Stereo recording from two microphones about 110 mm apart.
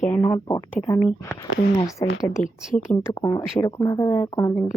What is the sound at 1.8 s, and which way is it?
A woman's voice, 25° left (ahead or behind).